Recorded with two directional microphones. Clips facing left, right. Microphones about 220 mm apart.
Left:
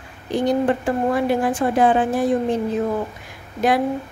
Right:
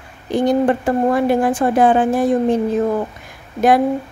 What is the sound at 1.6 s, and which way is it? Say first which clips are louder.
Speech: right 3 dB; 50° right (ahead or behind).